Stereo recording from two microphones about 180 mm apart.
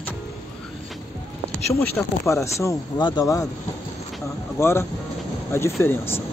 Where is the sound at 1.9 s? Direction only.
15° left (ahead or behind).